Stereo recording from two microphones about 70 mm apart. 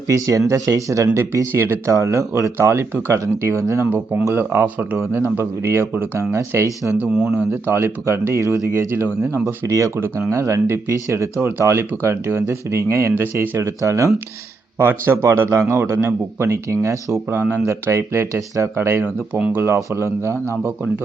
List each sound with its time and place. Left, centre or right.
0.1 s speech: right
4.4 s speech: right
5.1 s speech: right
11.3 s speech: right
13.1 s speech: right
13.6 s speech: right
14.8 s speech: right
17.2 s speech: right
19.3 s speech: right
19.6 s speech: right